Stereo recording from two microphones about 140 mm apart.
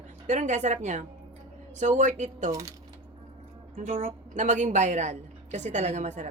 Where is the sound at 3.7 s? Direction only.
50° right (ahead or behind).